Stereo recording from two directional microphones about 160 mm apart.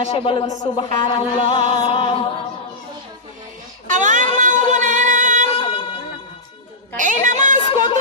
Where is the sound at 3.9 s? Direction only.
55° right (ahead or behind).